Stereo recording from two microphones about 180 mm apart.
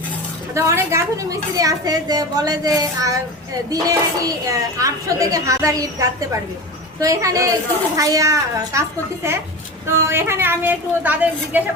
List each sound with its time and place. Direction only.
0.5 s a woman's voice: 15° right (ahead or behind)